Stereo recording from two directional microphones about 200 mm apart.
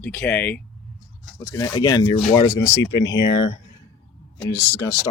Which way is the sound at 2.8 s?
65° left (ahead or behind).